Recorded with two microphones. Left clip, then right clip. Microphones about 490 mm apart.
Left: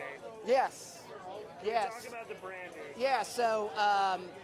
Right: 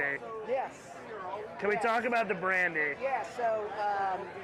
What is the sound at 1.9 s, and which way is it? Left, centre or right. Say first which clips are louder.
Speech: right 14 dB; right.